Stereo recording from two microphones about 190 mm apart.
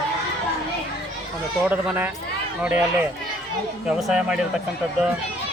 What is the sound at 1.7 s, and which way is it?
Speech, 10° right (ahead or behind).